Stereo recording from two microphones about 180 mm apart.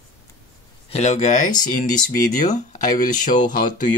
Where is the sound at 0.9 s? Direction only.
40° left (ahead or behind).